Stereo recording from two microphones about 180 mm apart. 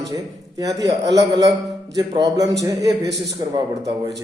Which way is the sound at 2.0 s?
20° right (ahead or behind).